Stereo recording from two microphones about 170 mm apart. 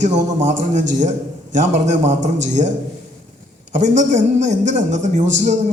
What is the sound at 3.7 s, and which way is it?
A man's voice, 45° right (ahead or behind).